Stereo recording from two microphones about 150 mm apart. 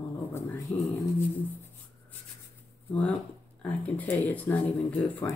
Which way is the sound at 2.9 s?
10° left (ahead or behind).